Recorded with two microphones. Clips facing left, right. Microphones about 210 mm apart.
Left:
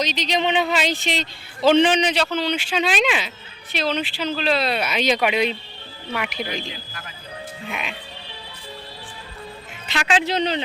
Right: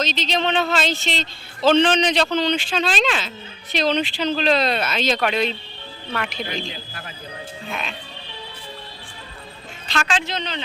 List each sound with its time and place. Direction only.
0.0 s speech: 15° left (ahead or behind)
6.6 s a man's voice: 25° right (ahead or behind)
7.7 s speech: 15° left (ahead or behind)
9.9 s speech: 15° left (ahead or behind)